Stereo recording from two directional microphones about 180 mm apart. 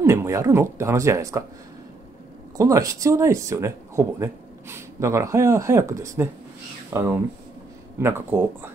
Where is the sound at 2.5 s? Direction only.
20° right (ahead or behind).